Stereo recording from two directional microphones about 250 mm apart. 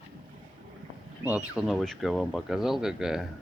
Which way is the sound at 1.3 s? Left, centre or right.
Centre.